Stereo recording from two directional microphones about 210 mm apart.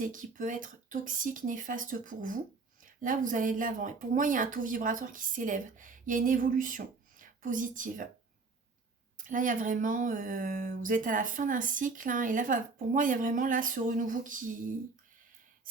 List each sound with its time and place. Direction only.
0.0 s speech: 40° right (ahead or behind)
9.1 s speech: 40° right (ahead or behind)